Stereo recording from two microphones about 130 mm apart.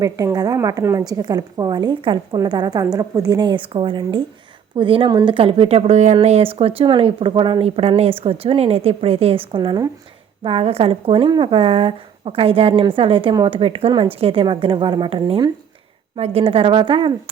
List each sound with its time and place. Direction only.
0.0 s a woman's voice: 25° right (ahead or behind)
10.4 s speech: 45° right (ahead or behind)